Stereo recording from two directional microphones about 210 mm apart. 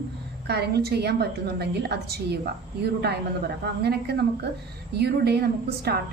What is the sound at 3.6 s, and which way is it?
A woman's voice, 50° right (ahead or behind).